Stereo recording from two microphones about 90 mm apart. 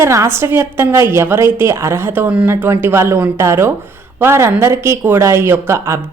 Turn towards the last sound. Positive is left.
turn(degrees=-30)  # may be behind; listen again after turning